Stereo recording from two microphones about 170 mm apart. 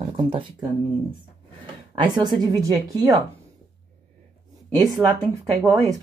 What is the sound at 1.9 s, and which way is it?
Speech, 25° right (ahead or behind).